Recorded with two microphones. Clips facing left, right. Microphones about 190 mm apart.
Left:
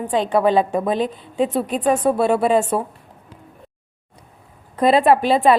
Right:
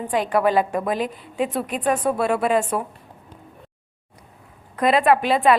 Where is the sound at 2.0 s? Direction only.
30° left (ahead or behind).